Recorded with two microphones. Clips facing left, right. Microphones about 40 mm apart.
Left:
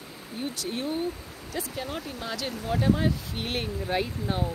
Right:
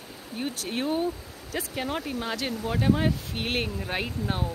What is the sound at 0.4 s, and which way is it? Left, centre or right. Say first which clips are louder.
Speech: right 2 dB; right.